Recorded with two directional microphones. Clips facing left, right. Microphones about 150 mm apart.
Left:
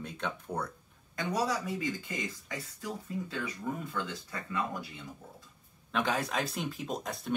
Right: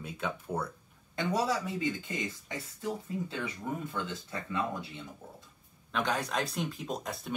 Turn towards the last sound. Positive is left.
turn(degrees=0)  # may be behind; listen again after turning